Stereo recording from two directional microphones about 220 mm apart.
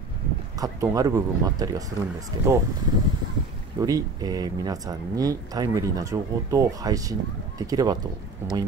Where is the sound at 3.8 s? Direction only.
15° right (ahead or behind).